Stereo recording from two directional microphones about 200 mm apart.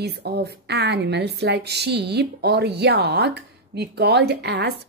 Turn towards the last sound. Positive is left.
turn(degrees=-55)  # may be behind; listen again after turning